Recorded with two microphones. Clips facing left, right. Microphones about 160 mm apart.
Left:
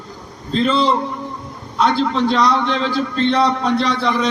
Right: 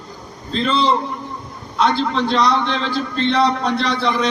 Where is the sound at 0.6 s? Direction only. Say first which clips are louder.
Left 2 dB; 45° left (ahead or behind).